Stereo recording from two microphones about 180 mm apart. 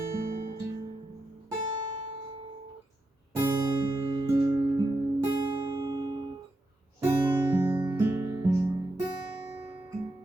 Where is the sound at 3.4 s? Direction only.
20° right (ahead or behind).